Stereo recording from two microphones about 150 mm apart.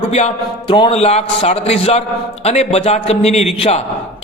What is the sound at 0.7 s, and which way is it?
A man's voice, 35° left (ahead or behind).